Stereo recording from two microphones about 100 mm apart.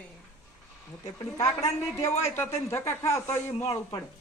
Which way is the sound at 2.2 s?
25° left (ahead or behind).